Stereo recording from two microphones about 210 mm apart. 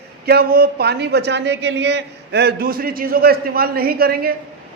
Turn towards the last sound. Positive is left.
turn(degrees=-45)  # may be behind; listen again after turning